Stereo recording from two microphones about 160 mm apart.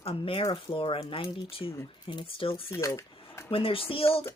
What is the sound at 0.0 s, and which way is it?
Speech, 35° left (ahead or behind).